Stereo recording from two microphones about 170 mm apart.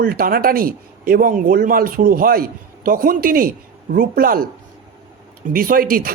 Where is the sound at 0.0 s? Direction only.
60° right (ahead or behind).